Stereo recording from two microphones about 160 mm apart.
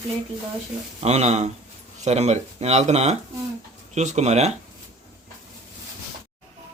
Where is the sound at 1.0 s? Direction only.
40° right (ahead or behind).